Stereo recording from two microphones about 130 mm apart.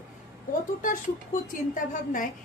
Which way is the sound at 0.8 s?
90° left.